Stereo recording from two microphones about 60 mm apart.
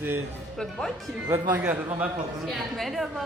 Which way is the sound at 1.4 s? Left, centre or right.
Right.